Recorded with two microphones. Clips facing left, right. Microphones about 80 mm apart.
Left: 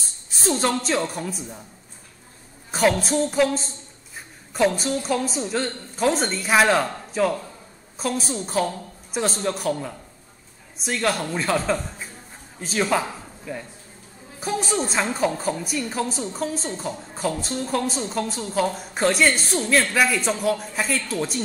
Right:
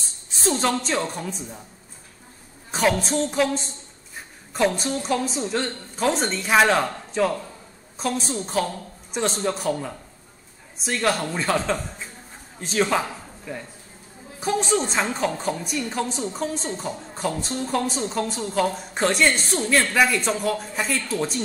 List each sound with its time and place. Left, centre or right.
0.3 s a woman's voice: centre
2.7 s a woman's voice: centre
14.4 s a woman's voice: centre